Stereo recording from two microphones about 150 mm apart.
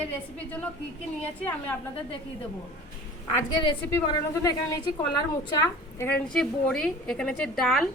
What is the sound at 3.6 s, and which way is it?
Speech, 30° left (ahead or behind).